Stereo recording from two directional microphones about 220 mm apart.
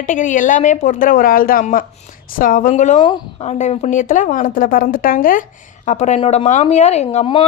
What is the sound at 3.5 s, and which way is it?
A woman's voice, 30° left (ahead or behind).